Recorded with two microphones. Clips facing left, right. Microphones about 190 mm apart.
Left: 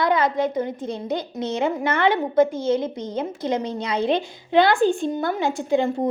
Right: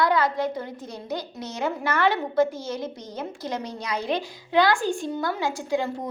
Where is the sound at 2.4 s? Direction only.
50° left (ahead or behind).